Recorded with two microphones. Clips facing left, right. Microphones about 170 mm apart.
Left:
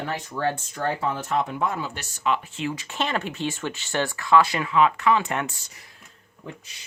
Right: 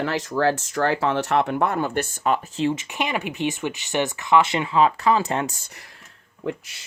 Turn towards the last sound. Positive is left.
turn(degrees=-80)